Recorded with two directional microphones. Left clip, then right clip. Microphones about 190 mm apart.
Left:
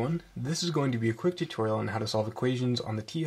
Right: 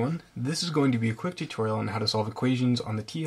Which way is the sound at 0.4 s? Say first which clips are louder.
Right 4 dB; 20° left (ahead or behind).